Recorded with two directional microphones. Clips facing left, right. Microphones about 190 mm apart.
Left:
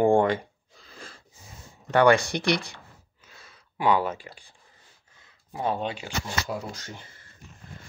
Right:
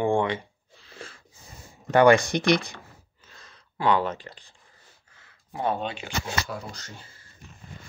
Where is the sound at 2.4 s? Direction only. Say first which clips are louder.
Right 4 dB; 45° right (ahead or behind).